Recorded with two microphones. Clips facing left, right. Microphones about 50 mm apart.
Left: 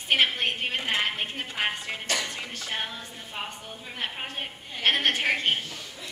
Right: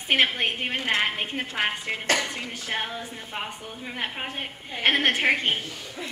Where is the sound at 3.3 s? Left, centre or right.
Right.